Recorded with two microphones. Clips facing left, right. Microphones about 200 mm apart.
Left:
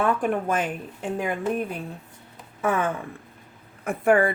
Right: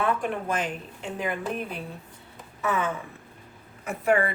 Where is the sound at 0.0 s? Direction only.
50° left (ahead or behind).